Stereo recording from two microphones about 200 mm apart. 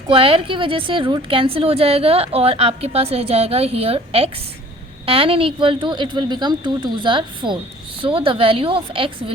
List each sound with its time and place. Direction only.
0.1 s a woman's voice: 25° right (ahead or behind)